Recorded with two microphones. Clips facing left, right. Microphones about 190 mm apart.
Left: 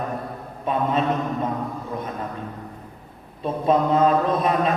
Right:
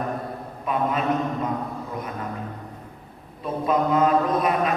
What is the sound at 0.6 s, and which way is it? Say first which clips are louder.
Speech: left 2 dB; 30° left (ahead or behind).